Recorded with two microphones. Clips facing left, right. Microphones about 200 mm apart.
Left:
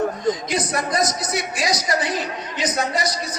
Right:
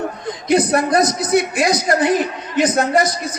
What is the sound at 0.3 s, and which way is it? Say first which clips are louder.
A man's voice: right 6 dB; 60° right (ahead or behind).